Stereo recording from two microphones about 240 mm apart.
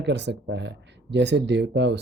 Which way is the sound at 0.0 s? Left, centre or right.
Right.